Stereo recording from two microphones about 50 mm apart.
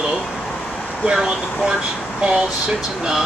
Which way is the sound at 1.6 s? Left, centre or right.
Centre.